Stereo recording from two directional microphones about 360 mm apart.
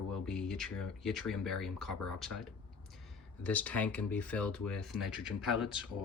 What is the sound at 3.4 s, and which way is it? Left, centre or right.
Speech, centre.